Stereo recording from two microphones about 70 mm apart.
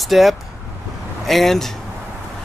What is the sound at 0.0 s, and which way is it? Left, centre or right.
Speech, centre.